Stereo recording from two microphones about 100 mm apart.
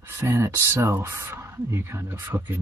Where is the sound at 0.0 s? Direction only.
20° right (ahead or behind).